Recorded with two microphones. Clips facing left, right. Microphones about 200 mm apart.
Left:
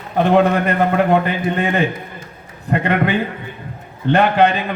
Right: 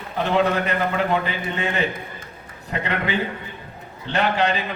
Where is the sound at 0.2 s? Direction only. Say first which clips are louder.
Left 6 dB; 55° left (ahead or behind).